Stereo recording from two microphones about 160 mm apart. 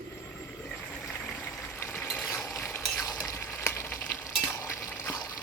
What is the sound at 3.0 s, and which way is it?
Frying, 20° left (ahead or behind).